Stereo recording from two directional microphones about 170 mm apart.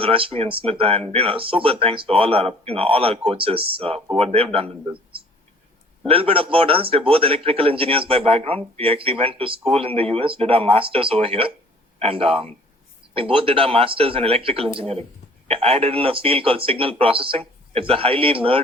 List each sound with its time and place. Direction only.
0.0 s speech: 30° right (ahead or behind)
6.1 s speech: 35° right (ahead or behind)